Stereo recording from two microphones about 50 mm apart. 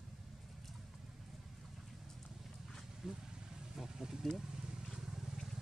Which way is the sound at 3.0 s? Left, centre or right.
Centre.